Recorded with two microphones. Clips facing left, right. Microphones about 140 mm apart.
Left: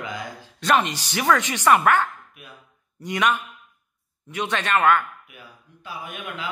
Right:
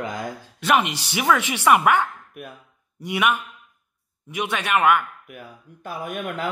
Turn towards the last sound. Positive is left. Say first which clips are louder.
# right 6 dB
turn(degrees=-50)  # may be behind; listen again after turning